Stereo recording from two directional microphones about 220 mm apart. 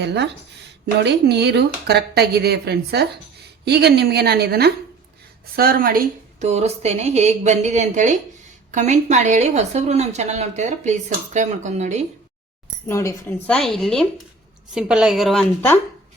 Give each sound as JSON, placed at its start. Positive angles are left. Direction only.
{"t": 0.0, "sound": "a woman's voice", "side_deg": -50}
{"t": 12.9, "sound": "speech", "side_deg": 10}